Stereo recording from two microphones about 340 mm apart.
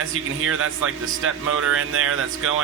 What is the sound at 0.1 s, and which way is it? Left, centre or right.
Speech, right.